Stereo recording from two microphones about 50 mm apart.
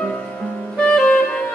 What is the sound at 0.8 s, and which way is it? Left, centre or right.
Music, centre.